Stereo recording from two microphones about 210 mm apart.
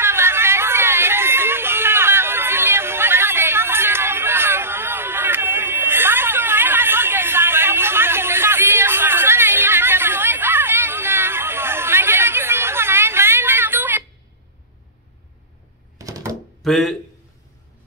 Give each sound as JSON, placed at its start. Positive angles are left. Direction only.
{"t": 0.0, "sound": "hubbub", "side_deg": -10}
{"t": 16.0, "sound": "a sound", "side_deg": -15}
{"t": 16.6, "sound": "speech", "side_deg": 0}